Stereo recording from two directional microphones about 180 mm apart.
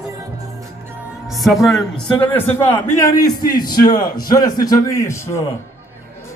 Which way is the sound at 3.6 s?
55° left (ahead or behind).